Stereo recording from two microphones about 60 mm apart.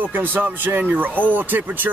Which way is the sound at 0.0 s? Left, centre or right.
Right.